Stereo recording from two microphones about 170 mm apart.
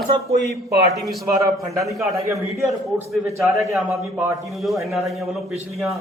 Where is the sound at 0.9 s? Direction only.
Centre (ahead or behind).